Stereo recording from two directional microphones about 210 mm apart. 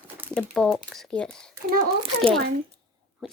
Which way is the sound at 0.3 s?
Centre (ahead or behind).